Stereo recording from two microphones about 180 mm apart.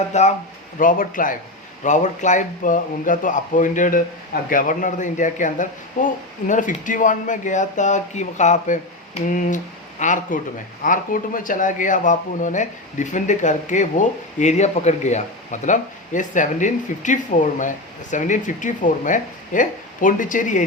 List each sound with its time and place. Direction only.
0.1 s speech: 40° left (ahead or behind)